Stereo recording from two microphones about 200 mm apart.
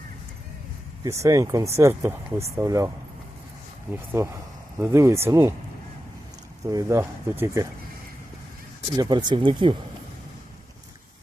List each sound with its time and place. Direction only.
1.0 s speech: 15° right (ahead or behind)
3.9 s speech: 15° right (ahead or behind)
6.7 s speech: 15° right (ahead or behind)
9.0 s speech: 20° right (ahead or behind)